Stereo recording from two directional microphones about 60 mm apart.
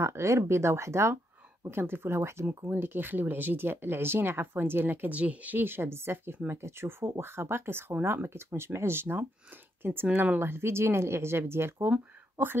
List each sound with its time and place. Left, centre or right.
0.0 s speech: right
1.7 s speech: right
2.7 s speech: right
5.6 s speech: right